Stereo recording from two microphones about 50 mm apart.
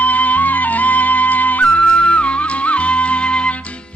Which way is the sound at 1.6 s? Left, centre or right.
Left.